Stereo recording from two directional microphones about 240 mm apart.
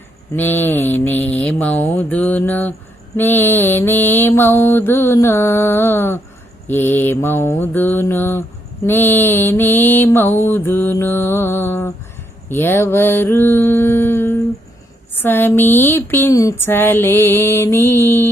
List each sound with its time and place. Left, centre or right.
0.3 s mantra: centre